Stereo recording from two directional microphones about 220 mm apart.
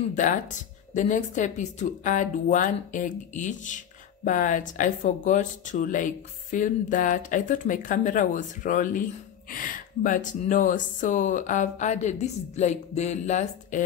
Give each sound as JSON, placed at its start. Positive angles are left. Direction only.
{"t": 0.1, "sound": "speech", "side_deg": 35}